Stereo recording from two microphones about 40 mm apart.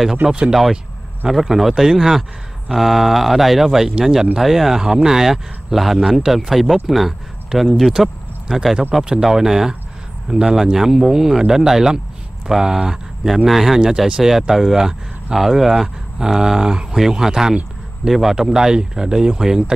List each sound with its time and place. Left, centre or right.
0.2 s speech: right
0.5 s speech: centre
8.9 s speech: centre